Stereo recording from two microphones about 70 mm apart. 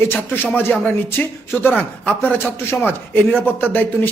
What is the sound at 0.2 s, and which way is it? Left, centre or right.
A man's voice, left.